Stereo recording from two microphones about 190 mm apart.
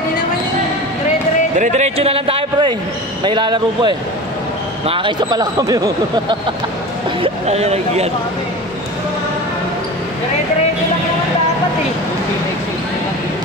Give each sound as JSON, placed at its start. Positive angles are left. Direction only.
{"t": 1.6, "sound": "a man's voice", "side_deg": -35}
{"t": 7.2, "sound": "speech", "side_deg": -35}